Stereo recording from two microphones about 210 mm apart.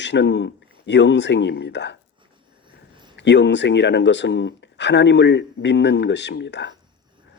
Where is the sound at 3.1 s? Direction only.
55° left (ahead or behind).